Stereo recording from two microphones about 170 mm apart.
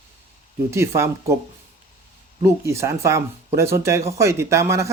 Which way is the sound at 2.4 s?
15° right (ahead or behind).